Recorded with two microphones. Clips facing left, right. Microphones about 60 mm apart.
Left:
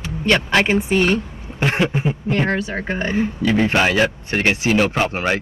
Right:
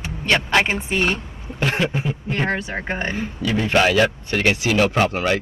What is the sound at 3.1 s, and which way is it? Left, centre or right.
A man's voice, left.